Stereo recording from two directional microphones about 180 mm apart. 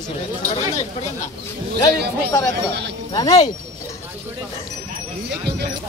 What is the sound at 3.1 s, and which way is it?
Speech, 20° left (ahead or behind).